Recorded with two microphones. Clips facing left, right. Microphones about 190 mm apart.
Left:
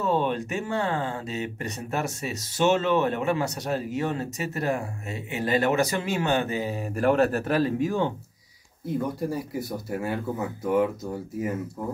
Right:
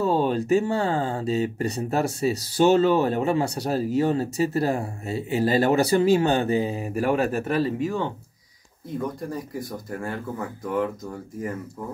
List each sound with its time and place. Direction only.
0.0 s speech: 35° right (ahead or behind)
6.8 s speech: 10° right (ahead or behind)
9.3 s speech: 5° left (ahead or behind)